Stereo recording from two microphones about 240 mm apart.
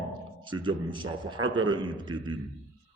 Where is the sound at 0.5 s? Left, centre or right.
Right.